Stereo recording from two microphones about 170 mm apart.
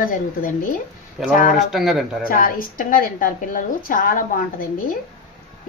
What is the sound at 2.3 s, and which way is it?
A woman's voice, 55° left (ahead or behind).